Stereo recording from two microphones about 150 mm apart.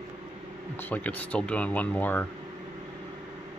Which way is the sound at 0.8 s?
10° left (ahead or behind).